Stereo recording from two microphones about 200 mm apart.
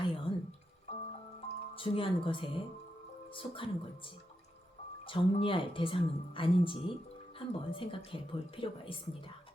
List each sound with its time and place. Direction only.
0.0 s drip: 25° left (ahead or behind)
0.9 s music: 30° left (ahead or behind)
1.7 s speech: 25° left (ahead or behind)